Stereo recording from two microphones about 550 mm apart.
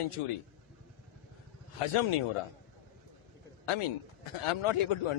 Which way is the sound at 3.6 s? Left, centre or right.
Left.